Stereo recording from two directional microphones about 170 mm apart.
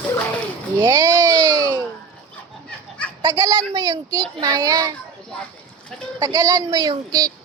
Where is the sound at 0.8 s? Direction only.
15° right (ahead or behind).